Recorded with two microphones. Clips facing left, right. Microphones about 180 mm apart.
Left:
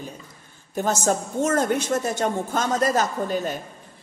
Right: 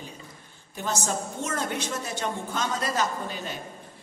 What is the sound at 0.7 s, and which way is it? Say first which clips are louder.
A woman's voice: left 7 dB; 45° left (ahead or behind).